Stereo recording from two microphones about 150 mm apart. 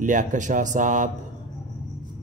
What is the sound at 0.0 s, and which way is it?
Speech, 55° right (ahead or behind).